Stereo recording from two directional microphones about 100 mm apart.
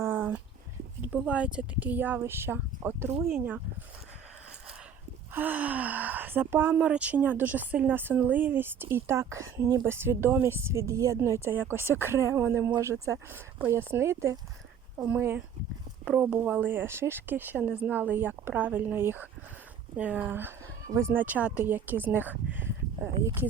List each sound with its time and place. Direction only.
0.0 s a sound: 20° right (ahead or behind)
1.1 s speech: 15° right (ahead or behind)
5.3 s speech: 15° right (ahead or behind); by 9.8 s 35° right (ahead or behind)
9.8 s speech: 25° right (ahead or behind)
20.8 s speech: 35° right (ahead or behind)
21.1 s speech: 15° right (ahead or behind)